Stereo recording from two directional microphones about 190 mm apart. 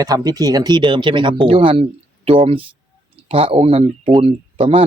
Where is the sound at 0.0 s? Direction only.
20° right (ahead or behind).